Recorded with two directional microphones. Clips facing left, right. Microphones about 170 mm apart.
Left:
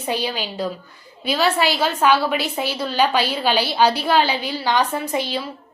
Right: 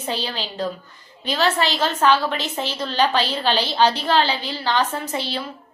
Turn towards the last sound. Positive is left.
turn(degrees=10)  # may be behind; listen again after turning